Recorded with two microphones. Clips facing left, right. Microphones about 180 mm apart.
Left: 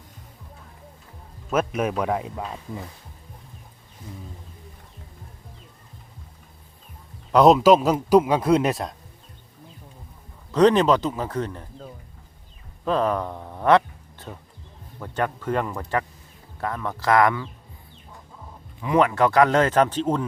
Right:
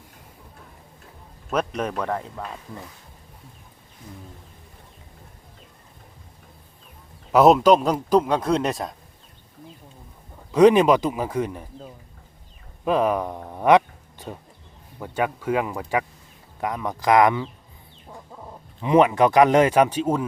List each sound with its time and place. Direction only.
1.5 s speech: 5° left (ahead or behind)
7.3 s speech: centre (ahead or behind)
10.5 s speech: 10° right (ahead or behind)
18.8 s speech: 20° right (ahead or behind)